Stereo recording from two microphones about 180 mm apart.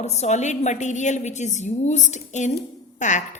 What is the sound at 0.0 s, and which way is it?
A woman's voice, 40° left (ahead or behind).